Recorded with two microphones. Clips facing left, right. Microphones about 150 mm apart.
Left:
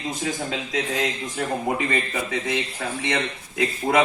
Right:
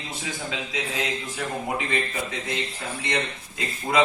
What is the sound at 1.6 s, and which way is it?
A man's voice, 55° left (ahead or behind).